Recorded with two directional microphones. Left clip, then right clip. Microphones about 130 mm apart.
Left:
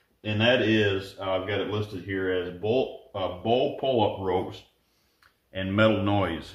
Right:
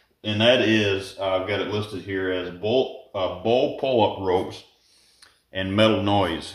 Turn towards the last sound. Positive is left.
turn(degrees=-35)  # may be behind; listen again after turning